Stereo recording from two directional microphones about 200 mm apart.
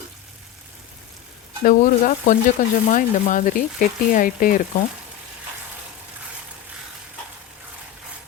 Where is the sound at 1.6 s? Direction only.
40° left (ahead or behind).